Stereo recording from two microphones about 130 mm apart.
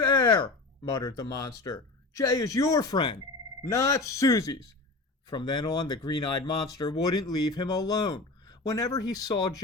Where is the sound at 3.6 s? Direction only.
25° left (ahead or behind).